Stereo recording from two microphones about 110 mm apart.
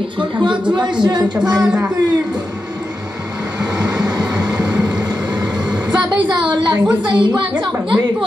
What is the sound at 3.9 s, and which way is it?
Train, 35° right (ahead or behind).